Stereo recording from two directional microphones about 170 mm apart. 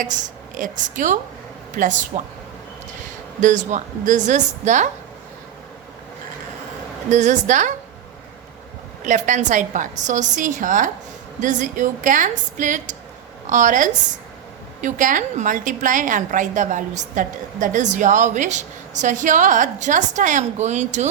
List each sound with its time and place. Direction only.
0.0 s a woman's voice: 50° right (ahead or behind)
3.4 s a woman's voice: 45° right (ahead or behind)
7.1 s a woman's voice: 45° right (ahead or behind)
9.0 s a woman's voice: 45° right (ahead or behind)